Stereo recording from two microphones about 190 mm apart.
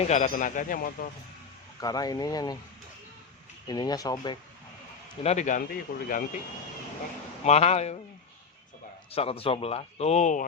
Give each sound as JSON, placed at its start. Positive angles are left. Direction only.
{"t": 0.1, "sound": "speech", "side_deg": 40}
{"t": 1.8, "sound": "speech", "side_deg": 20}
{"t": 3.7, "sound": "speech", "side_deg": 20}
{"t": 5.2, "sound": "a man's voice", "side_deg": 35}
{"t": 7.4, "sound": "a man's voice", "side_deg": 35}
{"t": 9.1, "sound": "a man's voice", "side_deg": 30}